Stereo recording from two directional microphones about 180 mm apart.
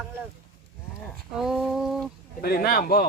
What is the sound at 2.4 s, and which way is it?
Speech, 55° left (ahead or behind).